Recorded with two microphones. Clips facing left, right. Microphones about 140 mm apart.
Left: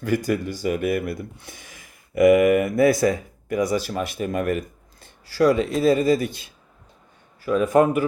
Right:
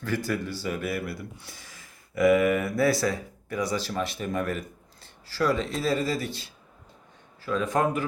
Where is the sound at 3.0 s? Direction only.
50° left (ahead or behind).